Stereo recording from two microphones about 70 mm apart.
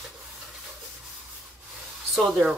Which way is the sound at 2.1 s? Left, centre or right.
Centre.